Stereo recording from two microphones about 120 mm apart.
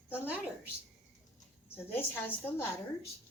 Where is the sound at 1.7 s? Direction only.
20° left (ahead or behind).